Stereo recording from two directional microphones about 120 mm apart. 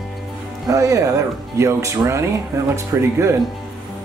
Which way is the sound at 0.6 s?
30° right (ahead or behind).